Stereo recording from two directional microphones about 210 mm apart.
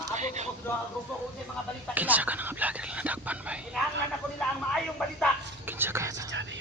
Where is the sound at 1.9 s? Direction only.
10° right (ahead or behind).